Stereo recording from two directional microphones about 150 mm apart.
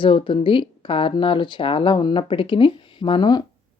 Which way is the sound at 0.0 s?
35° left (ahead or behind).